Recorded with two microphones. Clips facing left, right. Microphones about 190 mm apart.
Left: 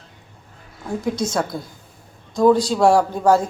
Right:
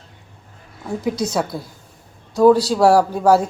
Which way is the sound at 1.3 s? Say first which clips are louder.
Right 1 dB; 5° right (ahead or behind).